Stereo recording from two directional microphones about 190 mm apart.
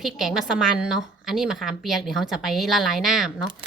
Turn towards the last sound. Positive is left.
turn(degrees=0)  # may be behind; listen again after turning